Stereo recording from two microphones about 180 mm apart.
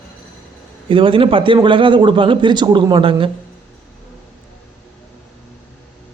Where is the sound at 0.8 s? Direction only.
30° right (ahead or behind).